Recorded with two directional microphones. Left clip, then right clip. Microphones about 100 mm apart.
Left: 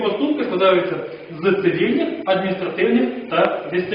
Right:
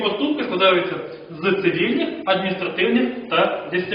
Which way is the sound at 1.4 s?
Centre (ahead or behind).